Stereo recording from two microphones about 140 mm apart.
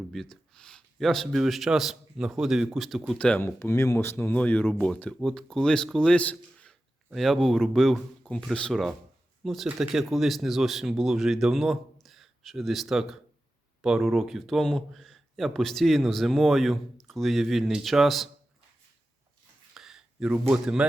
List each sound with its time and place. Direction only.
0.1 s speech: 5° left (ahead or behind)
19.7 s a sound: 5° right (ahead or behind)
20.5 s speech: 10° right (ahead or behind)